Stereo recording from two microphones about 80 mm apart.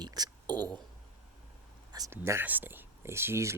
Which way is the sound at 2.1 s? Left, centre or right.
Right.